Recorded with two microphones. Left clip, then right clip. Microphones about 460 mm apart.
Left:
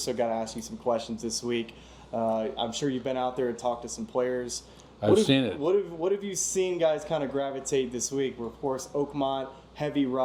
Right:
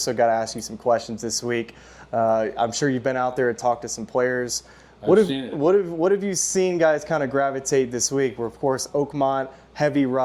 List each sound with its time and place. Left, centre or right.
0.0 s speech: right
2.1 s speech: right
5.0 s speech: left
5.6 s speech: right